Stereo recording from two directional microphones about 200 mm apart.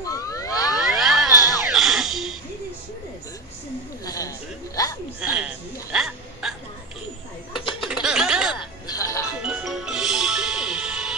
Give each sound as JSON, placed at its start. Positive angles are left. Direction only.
{"t": 0.0, "sound": "a sound", "side_deg": 15}
{"t": 0.7, "sound": "a sound", "side_deg": 0}
{"t": 1.3, "sound": "music", "side_deg": 15}
{"t": 1.6, "sound": "music", "side_deg": 0}
{"t": 4.0, "sound": "a sound", "side_deg": 20}
{"t": 5.2, "sound": "hiccup", "side_deg": -5}
{"t": 7.5, "sound": "laughter", "side_deg": 0}
{"t": 8.8, "sound": "music", "side_deg": 20}
{"t": 9.4, "sound": "music", "side_deg": -5}